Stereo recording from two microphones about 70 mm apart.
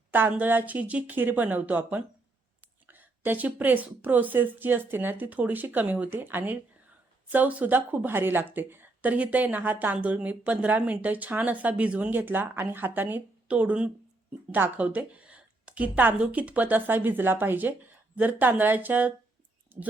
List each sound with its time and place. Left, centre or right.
0.1 s a woman's voice: right